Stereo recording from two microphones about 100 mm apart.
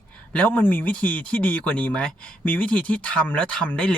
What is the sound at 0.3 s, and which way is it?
Speech, 15° left (ahead or behind).